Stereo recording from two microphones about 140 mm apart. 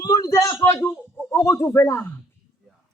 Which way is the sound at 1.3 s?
20° left (ahead or behind).